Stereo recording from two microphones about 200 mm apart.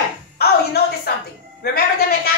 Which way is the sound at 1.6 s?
50° left (ahead or behind).